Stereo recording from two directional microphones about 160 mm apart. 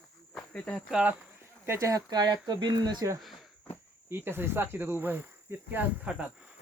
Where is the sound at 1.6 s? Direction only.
20° right (ahead or behind).